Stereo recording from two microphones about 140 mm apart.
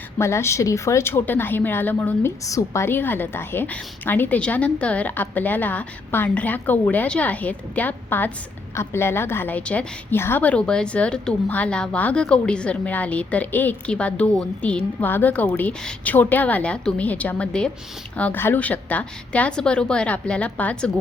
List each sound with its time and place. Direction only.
0.2 s a woman's voice: 20° left (ahead or behind)
2.4 s a woman's voice: 25° left (ahead or behind)